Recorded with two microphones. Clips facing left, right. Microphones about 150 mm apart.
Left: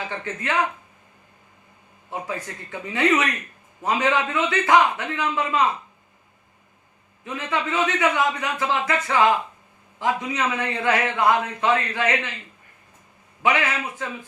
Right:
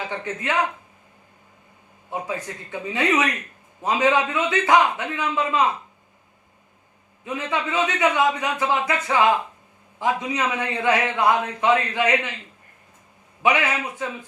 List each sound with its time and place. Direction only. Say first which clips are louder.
0.1 s a man's voice: right 1 dB; 15° right (ahead or behind)
2.0 s a man's voice: right 2 dB; 20° right (ahead or behind)
7.3 s a man's voice: even; 15° right (ahead or behind)
13.4 s a man's voice: right 1 dB; 15° right (ahead or behind)